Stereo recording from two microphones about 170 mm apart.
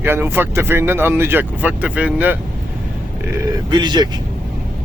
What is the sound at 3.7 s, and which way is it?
Speech, 25° right (ahead or behind).